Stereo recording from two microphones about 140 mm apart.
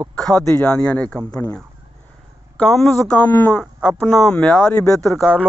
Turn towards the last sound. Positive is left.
turn(degrees=5)  # may be behind; listen again after turning